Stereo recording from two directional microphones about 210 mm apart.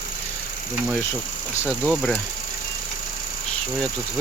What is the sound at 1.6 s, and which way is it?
Speech, centre (ahead or behind).